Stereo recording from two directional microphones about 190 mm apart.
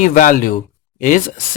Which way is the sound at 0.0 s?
45° left (ahead or behind).